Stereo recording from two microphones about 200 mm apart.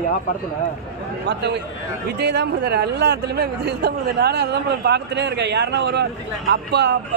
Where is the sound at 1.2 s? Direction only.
60° right (ahead or behind).